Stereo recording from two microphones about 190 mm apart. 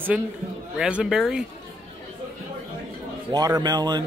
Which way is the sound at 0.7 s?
5° right (ahead or behind).